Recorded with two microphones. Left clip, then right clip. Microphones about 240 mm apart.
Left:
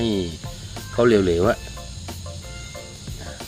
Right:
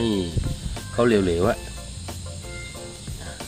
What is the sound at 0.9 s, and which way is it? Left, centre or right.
Speech, centre.